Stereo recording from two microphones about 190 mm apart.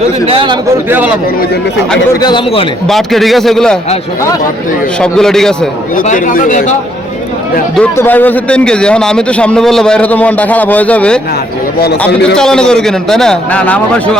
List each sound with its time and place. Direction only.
0.3 s a man's voice: 25° right (ahead or behind)
0.9 s speech: 10° right (ahead or behind)
2.2 s a man's voice: 25° left (ahead or behind)
2.8 s a man's voice: centre (ahead or behind)
4.9 s a man's voice: 5° left (ahead or behind)
6.0 s speech: 45° left (ahead or behind)
7.8 s a man's voice: 10° left (ahead or behind)
12.4 s a man's voice: 5° left (ahead or behind)